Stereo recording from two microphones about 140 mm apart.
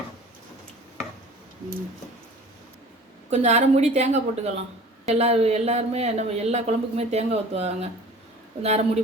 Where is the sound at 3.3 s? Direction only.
55° right (ahead or behind).